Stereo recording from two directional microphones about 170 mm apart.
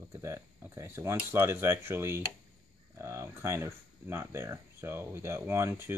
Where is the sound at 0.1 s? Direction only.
15° right (ahead or behind).